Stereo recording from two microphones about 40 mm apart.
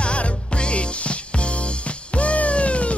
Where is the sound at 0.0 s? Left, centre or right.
Left.